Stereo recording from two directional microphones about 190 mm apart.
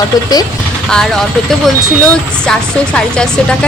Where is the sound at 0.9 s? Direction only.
Centre (ahead or behind).